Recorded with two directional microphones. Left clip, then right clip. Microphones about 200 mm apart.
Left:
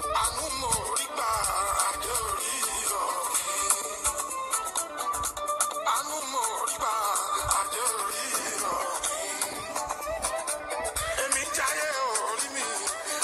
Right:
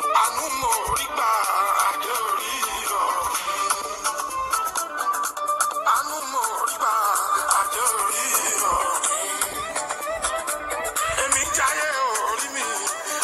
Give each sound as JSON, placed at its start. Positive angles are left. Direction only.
{"t": 0.0, "sound": "music", "side_deg": -30}
{"t": 11.0, "sound": "music", "side_deg": -35}